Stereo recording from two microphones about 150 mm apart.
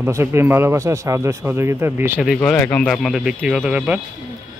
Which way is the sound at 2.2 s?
Centre (ahead or behind).